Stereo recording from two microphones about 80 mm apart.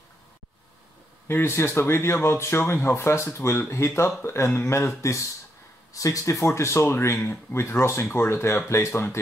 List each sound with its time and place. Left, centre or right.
1.2 s speech: left